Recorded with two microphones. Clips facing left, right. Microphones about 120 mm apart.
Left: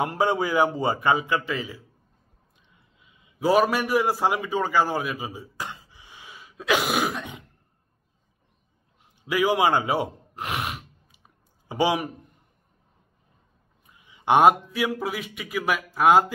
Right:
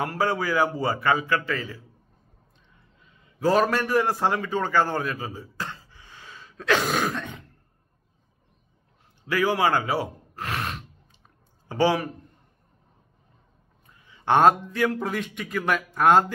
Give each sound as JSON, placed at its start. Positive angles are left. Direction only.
{"t": 0.0, "sound": "a man's voice", "side_deg": 20}
{"t": 3.0, "sound": "a man's voice", "side_deg": 10}
{"t": 9.2, "sound": "gasp", "side_deg": 15}
{"t": 13.8, "sound": "a man's voice", "side_deg": 15}